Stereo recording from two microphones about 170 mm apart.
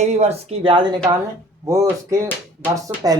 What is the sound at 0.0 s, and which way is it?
Speech, 40° right (ahead or behind).